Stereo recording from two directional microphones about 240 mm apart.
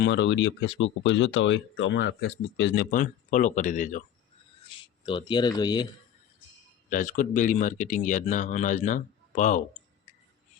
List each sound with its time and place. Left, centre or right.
0.0 s speech: left
2.9 s speech: left
4.7 s a sound: left
5.0 s speech: centre
6.9 s speech: left